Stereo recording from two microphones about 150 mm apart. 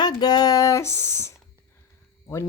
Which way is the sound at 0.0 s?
25° left (ahead or behind).